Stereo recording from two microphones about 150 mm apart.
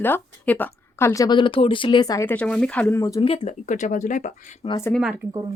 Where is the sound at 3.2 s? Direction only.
40° left (ahead or behind).